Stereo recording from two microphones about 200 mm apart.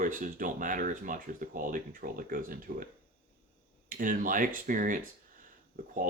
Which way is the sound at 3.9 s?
40° right (ahead or behind).